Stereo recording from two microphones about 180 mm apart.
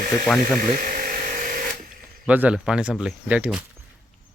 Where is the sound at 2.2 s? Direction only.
5° right (ahead or behind).